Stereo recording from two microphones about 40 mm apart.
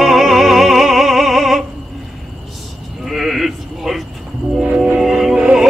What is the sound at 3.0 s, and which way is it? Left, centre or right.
Sheep, centre.